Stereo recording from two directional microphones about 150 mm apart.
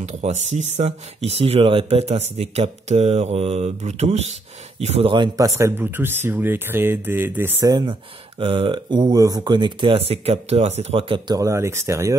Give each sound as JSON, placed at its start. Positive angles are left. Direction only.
{"t": 0.0, "sound": "speech", "side_deg": -50}
{"t": 5.1, "sound": "speech", "side_deg": -25}
{"t": 7.7, "sound": "speech", "side_deg": -30}
{"t": 11.3, "sound": "speech", "side_deg": -20}